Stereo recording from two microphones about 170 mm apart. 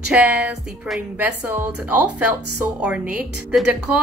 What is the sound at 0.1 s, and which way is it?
A woman's voice, 5° right (ahead or behind).